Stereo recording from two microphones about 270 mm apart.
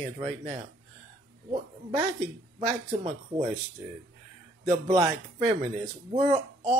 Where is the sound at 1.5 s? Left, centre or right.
Right.